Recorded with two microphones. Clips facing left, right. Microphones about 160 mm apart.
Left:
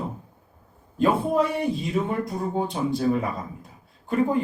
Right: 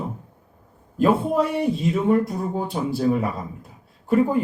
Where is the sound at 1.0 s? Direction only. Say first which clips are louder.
Right 2 dB; centre (ahead or behind).